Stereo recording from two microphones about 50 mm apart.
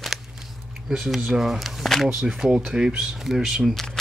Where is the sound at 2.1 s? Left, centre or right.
Centre.